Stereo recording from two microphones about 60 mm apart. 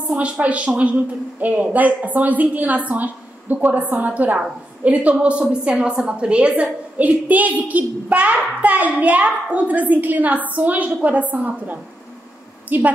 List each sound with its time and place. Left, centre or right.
0.1 s a woman's voice: right